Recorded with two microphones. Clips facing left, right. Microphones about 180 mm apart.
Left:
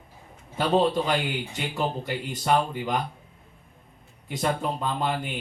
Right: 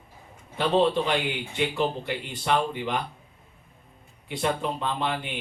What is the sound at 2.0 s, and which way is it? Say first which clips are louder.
Speech: left 2 dB; 40° left (ahead or behind).